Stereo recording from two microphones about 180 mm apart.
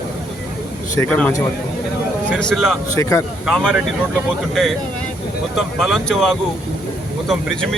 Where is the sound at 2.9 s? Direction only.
15° left (ahead or behind).